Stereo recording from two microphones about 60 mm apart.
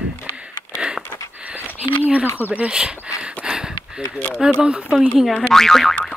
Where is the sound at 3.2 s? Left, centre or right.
Centre.